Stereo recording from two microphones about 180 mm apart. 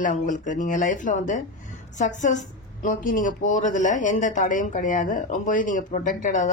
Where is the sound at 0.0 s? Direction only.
45° left (ahead or behind).